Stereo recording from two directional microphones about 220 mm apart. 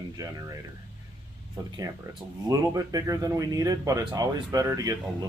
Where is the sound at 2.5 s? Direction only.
15° right (ahead or behind).